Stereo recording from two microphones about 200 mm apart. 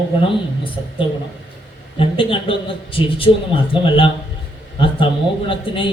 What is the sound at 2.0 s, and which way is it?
A man's voice, 25° left (ahead or behind).